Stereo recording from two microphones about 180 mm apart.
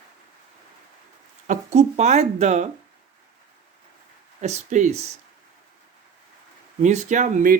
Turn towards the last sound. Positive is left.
turn(degrees=-45)  # may be behind; listen again after turning